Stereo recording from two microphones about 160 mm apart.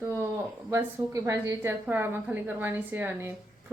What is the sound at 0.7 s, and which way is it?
Speech, 15° right (ahead or behind).